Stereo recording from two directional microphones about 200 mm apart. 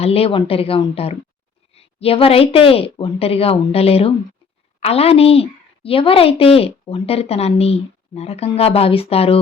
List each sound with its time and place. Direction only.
0.0 s a woman's voice: 30° left (ahead or behind)